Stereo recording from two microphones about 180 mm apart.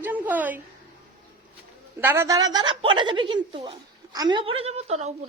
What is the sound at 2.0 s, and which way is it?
A woman's voice, 15° right (ahead or behind).